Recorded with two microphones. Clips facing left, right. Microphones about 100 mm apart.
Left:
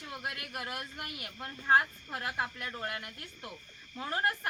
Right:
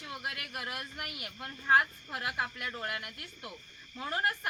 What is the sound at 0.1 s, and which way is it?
Speech, 5° right (ahead or behind).